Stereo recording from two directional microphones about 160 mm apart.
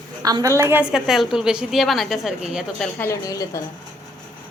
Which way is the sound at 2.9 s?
15° left (ahead or behind).